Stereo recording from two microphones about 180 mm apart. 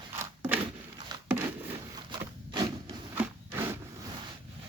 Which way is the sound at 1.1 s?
20° right (ahead or behind).